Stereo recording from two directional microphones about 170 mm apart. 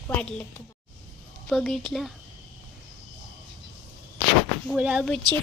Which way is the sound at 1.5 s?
Centre (ahead or behind).